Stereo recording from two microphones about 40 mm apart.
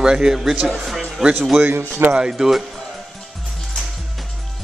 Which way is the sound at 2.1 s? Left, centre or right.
Centre.